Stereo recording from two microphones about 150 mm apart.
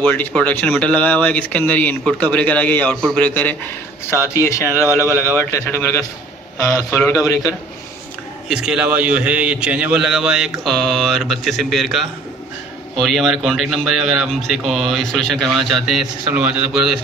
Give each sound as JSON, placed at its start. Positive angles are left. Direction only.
{"t": 0.0, "sound": "a man's voice", "side_deg": 10}
{"t": 8.5, "sound": "speech", "side_deg": -5}